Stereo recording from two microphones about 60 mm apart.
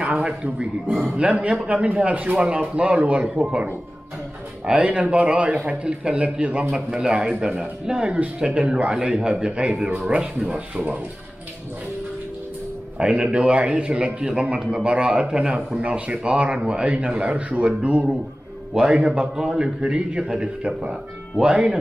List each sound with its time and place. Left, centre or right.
0.0 s a man's voice: centre
4.6 s a man's voice: right
12.9 s a man's voice: centre